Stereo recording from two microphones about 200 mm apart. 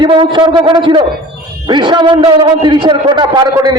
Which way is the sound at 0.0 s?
25° right (ahead or behind).